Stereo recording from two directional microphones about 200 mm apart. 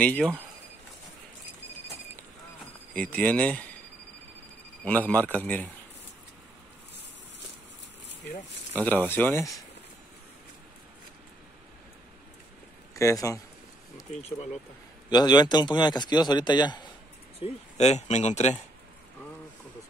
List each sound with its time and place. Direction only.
0.0 s speech: 5° left (ahead or behind)
2.9 s a man's voice: 5° left (ahead or behind)
4.8 s a man's voice: 10° left (ahead or behind)
8.7 s a man's voice: 10° left (ahead or behind)
12.9 s a man's voice: 15° left (ahead or behind)
15.0 s a man's voice: 20° left (ahead or behind)
17.4 s speech: 30° left (ahead or behind)